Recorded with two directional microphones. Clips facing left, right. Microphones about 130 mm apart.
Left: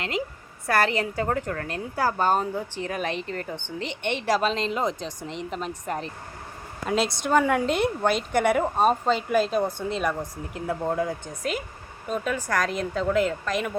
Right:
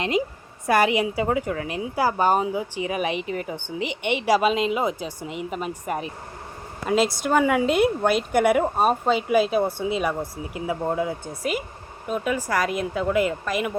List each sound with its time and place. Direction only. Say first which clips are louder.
0.7 s a woman's voice: right 3 dB; 15° right (ahead or behind)